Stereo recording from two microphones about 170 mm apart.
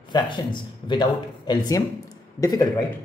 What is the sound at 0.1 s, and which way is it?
Speech, 25° left (ahead or behind).